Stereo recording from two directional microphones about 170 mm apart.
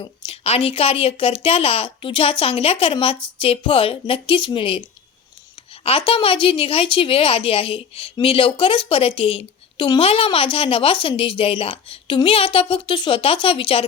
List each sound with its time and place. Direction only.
0.0 s a woman's voice: 35° left (ahead or behind)
5.8 s a woman's voice: 35° left (ahead or behind)